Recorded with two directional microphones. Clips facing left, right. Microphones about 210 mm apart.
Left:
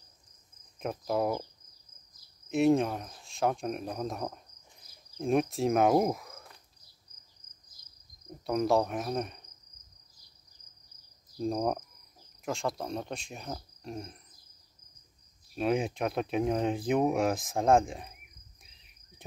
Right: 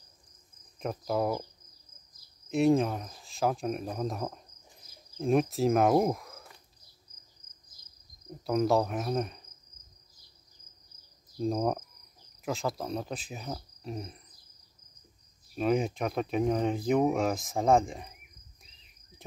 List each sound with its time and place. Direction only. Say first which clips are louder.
0.7 s speech: even; centre (ahead or behind)
2.5 s speech: even; centre (ahead or behind)
8.5 s speech: right 1 dB; centre (ahead or behind)
11.3 s speech: right 1 dB; centre (ahead or behind)
15.5 s speech: right 1 dB; centre (ahead or behind)